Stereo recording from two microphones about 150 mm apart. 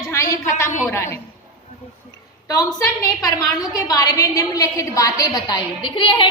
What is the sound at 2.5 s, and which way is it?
A woman's voice, 20° left (ahead or behind).